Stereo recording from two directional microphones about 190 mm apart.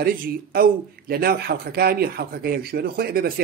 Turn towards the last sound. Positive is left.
turn(degrees=-50)  # may be behind; listen again after turning